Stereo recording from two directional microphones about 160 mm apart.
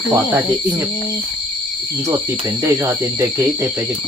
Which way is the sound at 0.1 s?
15° right (ahead or behind).